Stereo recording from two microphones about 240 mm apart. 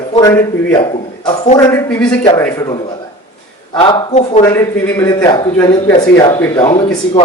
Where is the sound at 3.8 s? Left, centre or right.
Left.